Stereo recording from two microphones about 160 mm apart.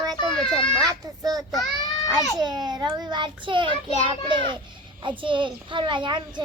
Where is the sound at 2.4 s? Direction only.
25° right (ahead or behind).